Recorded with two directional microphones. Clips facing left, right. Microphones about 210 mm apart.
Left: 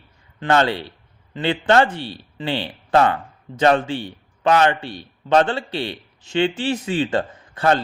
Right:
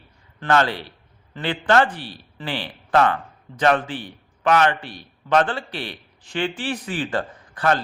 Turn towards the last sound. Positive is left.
turn(degrees=25)  # may be behind; listen again after turning